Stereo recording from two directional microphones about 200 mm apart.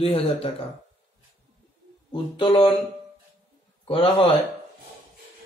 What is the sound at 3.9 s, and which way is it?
Speech, 25° left (ahead or behind).